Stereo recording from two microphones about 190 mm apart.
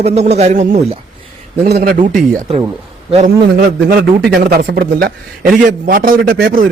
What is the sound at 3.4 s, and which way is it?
A man's voice, 60° right (ahead or behind).